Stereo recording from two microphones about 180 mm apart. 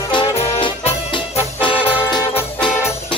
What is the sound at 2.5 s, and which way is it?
Music, 5° left (ahead or behind).